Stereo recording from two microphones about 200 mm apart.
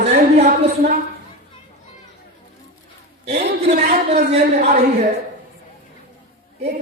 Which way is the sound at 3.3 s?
35° right (ahead or behind).